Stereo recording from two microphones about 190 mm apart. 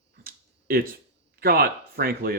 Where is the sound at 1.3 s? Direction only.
55° right (ahead or behind).